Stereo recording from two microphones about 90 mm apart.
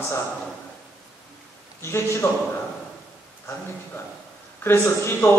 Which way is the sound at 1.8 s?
30° left (ahead or behind).